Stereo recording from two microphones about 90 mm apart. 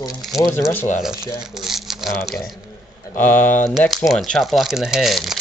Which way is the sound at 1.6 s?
5° right (ahead or behind).